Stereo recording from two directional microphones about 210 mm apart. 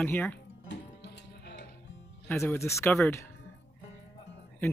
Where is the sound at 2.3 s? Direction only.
10° left (ahead or behind).